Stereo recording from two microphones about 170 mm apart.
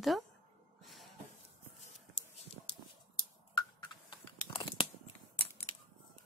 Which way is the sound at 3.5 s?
25° left (ahead or behind).